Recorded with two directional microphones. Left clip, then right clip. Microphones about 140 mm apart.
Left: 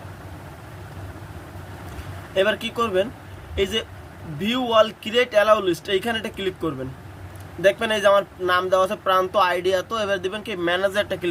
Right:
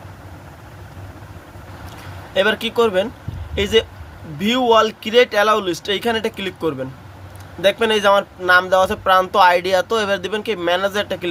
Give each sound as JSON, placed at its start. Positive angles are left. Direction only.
{"t": 2.3, "sound": "speech", "side_deg": -50}